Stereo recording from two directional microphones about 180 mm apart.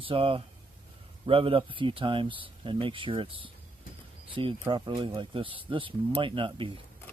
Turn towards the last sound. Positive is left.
turn(degrees=-30)  # may be behind; listen again after turning